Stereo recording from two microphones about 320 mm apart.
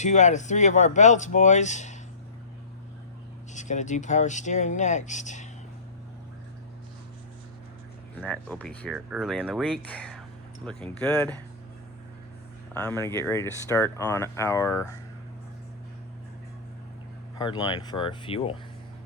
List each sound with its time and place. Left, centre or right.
0.0 s speech: left
3.5 s speech: left
8.2 s speech: centre
12.7 s speech: centre
17.3 s speech: centre